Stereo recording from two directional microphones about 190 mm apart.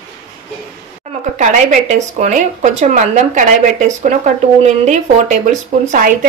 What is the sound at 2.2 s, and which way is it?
A woman's voice, 40° right (ahead or behind).